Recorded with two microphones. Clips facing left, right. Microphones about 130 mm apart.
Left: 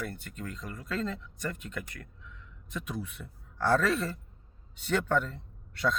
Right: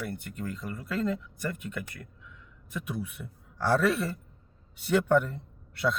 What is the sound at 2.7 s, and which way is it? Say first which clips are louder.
Speech: right 2 dB; 10° right (ahead or behind).